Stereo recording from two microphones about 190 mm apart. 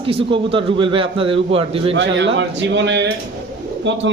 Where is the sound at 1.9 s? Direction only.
70° right (ahead or behind).